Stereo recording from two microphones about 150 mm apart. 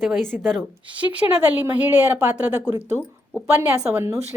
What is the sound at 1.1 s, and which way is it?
A woman's voice, 10° right (ahead or behind).